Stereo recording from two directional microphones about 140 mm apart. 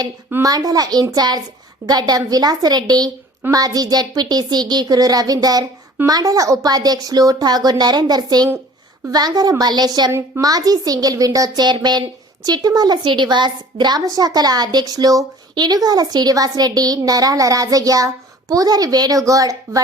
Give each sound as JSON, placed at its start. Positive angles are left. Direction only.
{"t": 0.4, "sound": "speech", "side_deg": -25}
{"t": 10.1, "sound": "speech", "side_deg": -20}